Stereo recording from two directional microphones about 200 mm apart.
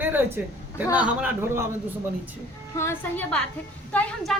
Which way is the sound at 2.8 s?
10° left (ahead or behind).